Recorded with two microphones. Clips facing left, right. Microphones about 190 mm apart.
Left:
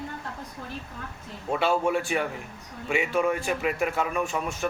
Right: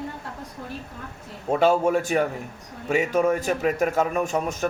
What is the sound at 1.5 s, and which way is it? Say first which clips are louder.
A man's voice: right 5 dB; 40° right (ahead or behind).